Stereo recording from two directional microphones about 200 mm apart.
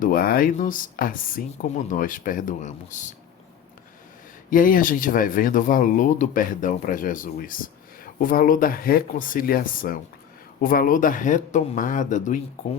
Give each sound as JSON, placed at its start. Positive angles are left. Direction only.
{"t": 0.0, "sound": "speech", "side_deg": 45}
{"t": 4.4, "sound": "speech", "side_deg": 45}